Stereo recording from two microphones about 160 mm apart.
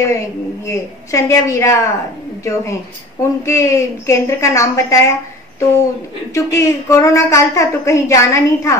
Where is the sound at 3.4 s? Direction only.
20° left (ahead or behind).